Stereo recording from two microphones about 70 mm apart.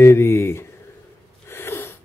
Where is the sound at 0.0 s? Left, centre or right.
Left.